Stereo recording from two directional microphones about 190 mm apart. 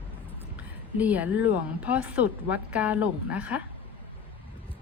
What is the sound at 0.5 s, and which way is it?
A woman's voice, 10° right (ahead or behind).